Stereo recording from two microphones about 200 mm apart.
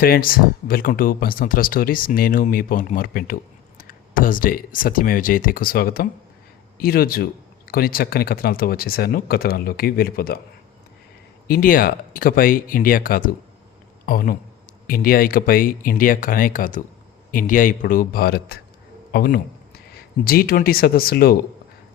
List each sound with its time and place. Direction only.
0.0 s speech: 45° left (ahead or behind)
11.4 s speech: 45° left (ahead or behind)